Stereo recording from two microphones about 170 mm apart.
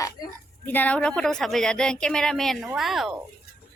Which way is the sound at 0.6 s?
10° left (ahead or behind).